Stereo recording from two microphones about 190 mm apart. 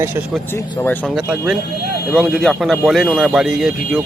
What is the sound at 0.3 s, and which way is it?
Speech, centre (ahead or behind).